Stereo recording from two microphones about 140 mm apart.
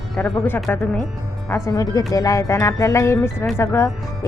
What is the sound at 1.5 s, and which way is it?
A woman's voice, 20° left (ahead or behind).